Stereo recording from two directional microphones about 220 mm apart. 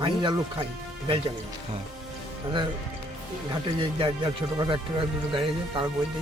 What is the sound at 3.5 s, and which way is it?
Speech, 20° right (ahead or behind).